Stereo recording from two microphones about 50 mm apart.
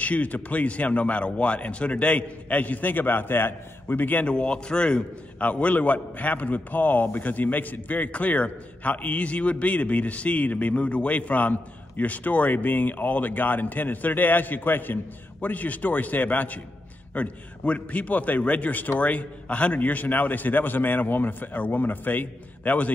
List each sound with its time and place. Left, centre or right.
0.0 s a man's voice: left
4.3 s a man's voice: centre